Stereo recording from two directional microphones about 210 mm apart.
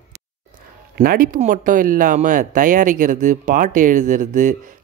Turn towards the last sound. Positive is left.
turn(degrees=-35)  # may be behind; listen again after turning